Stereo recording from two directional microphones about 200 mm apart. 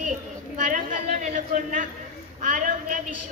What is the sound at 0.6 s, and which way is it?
A woman's voice, 40° right (ahead or behind).